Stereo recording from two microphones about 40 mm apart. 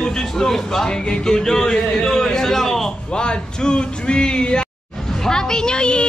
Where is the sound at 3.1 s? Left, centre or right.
Left.